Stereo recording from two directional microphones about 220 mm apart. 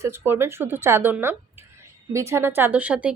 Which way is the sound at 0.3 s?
10° right (ahead or behind).